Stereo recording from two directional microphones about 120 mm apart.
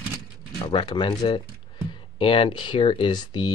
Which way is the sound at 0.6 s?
40° left (ahead or behind).